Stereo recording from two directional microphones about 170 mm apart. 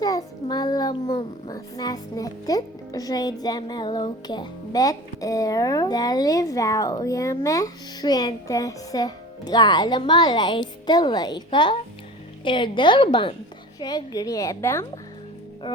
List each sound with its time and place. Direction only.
0.0 s a child's voice: 20° left (ahead or behind)